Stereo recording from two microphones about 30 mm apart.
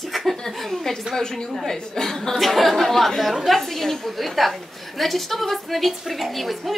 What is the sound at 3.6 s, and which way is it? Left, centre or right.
Speech, centre.